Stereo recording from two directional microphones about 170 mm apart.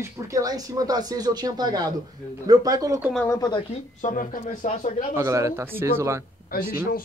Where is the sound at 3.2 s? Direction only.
20° left (ahead or behind).